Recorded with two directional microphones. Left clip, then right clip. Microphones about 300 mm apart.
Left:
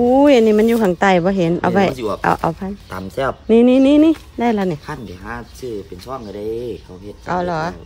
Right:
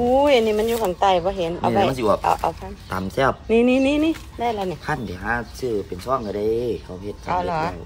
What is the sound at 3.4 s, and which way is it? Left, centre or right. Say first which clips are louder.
Speech: left 9 dB; left.